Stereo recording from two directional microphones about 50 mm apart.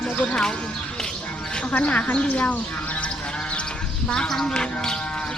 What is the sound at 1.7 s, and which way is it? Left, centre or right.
Speech, left.